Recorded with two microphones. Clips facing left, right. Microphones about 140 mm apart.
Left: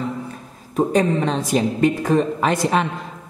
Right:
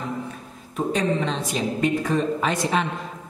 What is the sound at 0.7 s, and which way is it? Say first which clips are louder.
Speech: left 5 dB; 45° left (ahead or behind).